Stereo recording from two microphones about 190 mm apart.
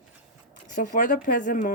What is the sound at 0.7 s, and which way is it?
Speech, 45° left (ahead or behind).